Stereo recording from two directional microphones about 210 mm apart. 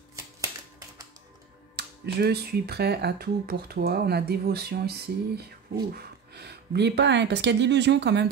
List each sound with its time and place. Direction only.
1.8 s speech: 50° right (ahead or behind)